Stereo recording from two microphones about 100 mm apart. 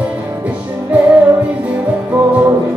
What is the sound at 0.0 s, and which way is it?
Music, 15° right (ahead or behind).